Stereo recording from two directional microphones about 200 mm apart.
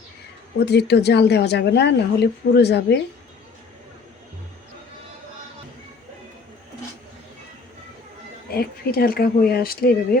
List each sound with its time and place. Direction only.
0.6 s speech: 55° left (ahead or behind)
8.5 s speech: 50° left (ahead or behind)